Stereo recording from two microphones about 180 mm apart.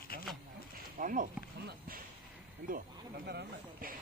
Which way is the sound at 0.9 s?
50° right (ahead or behind).